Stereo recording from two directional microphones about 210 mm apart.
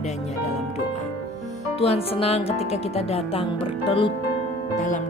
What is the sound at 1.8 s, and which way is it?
Music, 30° left (ahead or behind).